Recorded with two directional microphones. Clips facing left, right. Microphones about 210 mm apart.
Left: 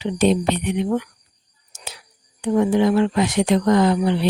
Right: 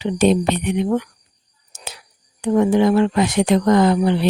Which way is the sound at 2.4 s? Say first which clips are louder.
Right 2 dB; 50° right (ahead or behind).